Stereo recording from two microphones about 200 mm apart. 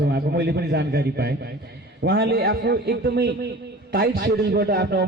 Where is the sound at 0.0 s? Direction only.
55° right (ahead or behind).